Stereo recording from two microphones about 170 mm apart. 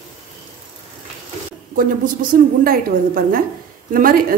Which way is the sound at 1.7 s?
55° right (ahead or behind).